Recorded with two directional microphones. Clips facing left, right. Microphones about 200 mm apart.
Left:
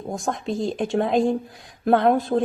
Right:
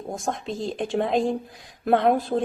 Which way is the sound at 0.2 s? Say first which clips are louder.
Left 5 dB; centre (ahead or behind).